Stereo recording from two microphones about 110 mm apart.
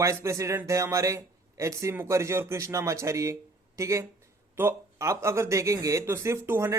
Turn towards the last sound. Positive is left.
turn(degrees=-25)  # may be behind; listen again after turning